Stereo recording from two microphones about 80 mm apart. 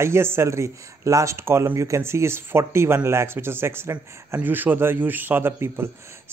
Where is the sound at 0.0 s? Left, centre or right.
Right.